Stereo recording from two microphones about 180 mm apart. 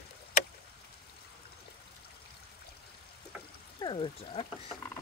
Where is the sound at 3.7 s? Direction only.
25° left (ahead or behind).